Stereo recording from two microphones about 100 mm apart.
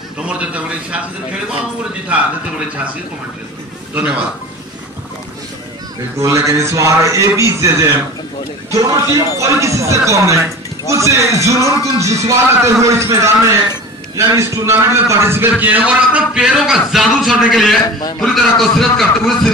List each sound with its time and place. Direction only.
0.3 s a man's voice: 10° right (ahead or behind)
3.9 s speech: 15° right (ahead or behind)
6.1 s a man's voice: 30° right (ahead or behind); by 19.5 s centre (ahead or behind)